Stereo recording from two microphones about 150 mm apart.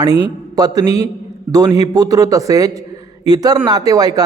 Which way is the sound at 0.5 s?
25° right (ahead or behind).